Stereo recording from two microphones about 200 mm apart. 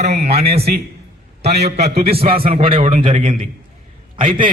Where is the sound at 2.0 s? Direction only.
30° right (ahead or behind).